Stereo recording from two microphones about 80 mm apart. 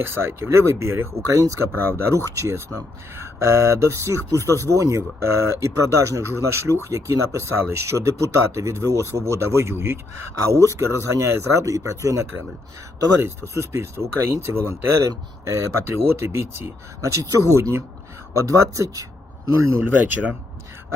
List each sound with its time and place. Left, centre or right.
0.0 s speech: right
13.5 s speech: right
19.8 s speech: right